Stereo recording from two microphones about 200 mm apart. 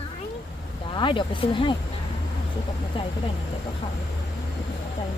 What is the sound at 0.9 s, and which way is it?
Speech, 25° left (ahead or behind).